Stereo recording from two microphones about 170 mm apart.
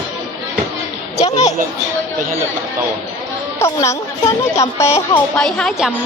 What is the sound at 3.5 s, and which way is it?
Speech, 15° left (ahead or behind).